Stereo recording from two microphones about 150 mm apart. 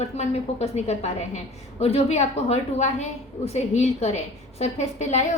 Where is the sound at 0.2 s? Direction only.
45° left (ahead or behind).